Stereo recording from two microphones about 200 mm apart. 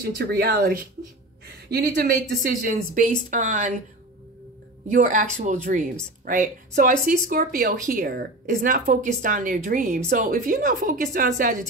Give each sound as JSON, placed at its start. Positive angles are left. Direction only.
{"t": 0.0, "sound": "speech", "side_deg": -50}
{"t": 4.8, "sound": "speech", "side_deg": -40}